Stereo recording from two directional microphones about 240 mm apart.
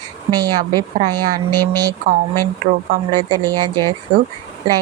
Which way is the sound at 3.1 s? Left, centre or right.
Centre.